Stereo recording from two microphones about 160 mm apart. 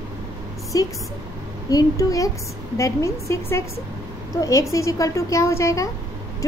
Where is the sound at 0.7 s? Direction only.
20° left (ahead or behind).